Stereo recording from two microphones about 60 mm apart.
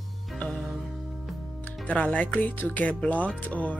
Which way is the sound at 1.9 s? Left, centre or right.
Left.